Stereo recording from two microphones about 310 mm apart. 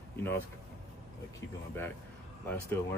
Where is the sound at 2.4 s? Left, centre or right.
Centre.